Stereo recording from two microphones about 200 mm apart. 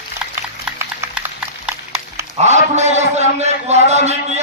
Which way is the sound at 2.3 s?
35° right (ahead or behind).